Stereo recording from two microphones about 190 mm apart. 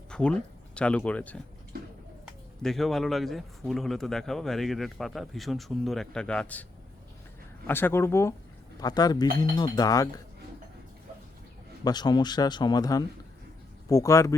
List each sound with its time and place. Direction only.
0.1 s speech: 5° left (ahead or behind)
1.7 s a sound: 55° right (ahead or behind)
2.6 s speech: centre (ahead or behind)
7.7 s speech: 10° left (ahead or behind)
11.9 s speech: 20° left (ahead or behind)